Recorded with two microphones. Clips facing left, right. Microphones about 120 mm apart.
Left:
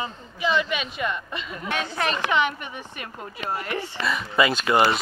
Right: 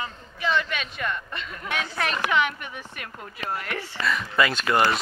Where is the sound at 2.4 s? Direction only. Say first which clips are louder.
Left 2 dB; 25° left (ahead or behind).